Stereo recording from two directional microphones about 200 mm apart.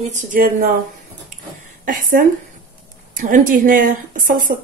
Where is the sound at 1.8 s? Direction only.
45° right (ahead or behind).